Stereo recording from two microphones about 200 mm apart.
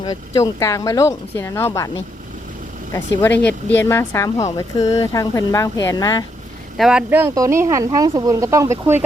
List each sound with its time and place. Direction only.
0.0 s speech: 20° left (ahead or behind)
2.9 s speech: 10° left (ahead or behind)
6.7 s speech: 5° right (ahead or behind)